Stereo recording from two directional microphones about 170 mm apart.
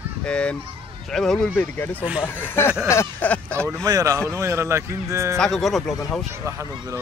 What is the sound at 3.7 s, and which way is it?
Speech, 20° right (ahead or behind).